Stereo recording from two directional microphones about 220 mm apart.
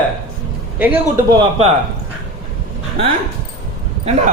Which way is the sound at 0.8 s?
10° right (ahead or behind).